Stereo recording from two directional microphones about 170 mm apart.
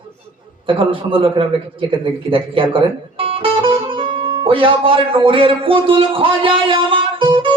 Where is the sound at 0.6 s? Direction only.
30° right (ahead or behind).